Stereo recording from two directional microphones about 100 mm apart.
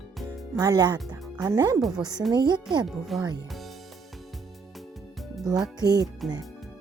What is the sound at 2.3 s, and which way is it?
Speech, 45° right (ahead or behind).